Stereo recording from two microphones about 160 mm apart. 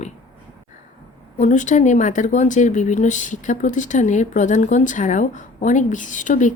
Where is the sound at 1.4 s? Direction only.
50° left (ahead or behind).